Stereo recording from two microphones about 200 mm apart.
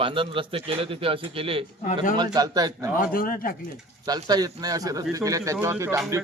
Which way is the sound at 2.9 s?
45° left (ahead or behind).